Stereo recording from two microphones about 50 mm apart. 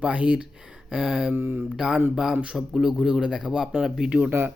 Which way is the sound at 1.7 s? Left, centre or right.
Centre.